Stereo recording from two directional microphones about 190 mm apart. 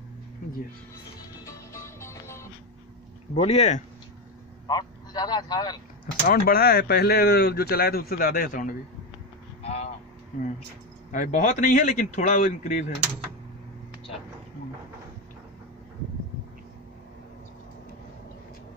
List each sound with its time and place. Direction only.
1.4 s music: 15° left (ahead or behind)
3.3 s speech: 35° left (ahead or behind)
4.6 s a man's voice: 20° left (ahead or behind)
6.2 s speech: 50° left (ahead or behind)
9.6 s vehicle: 30° left (ahead or behind)
11.1 s speech: 40° left (ahead or behind)